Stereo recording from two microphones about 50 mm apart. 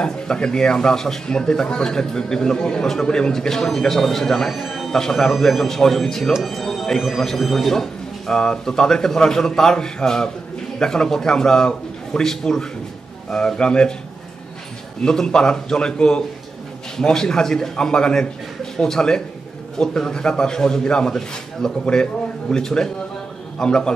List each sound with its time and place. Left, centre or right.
0.0 s speech: centre
4.9 s a man's voice: centre
15.0 s a man's voice: centre